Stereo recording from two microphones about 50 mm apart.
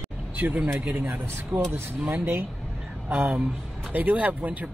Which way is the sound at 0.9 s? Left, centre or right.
Right.